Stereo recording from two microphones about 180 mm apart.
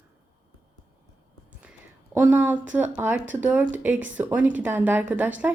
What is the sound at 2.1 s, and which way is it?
Speech, 10° right (ahead or behind).